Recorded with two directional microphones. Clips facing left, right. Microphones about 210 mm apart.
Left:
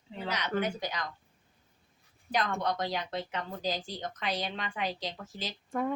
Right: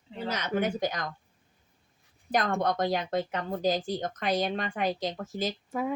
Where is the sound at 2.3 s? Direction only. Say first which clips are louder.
Right 4 dB; 50° right (ahead or behind).